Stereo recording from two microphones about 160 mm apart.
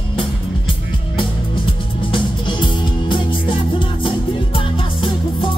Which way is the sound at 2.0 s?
30° left (ahead or behind).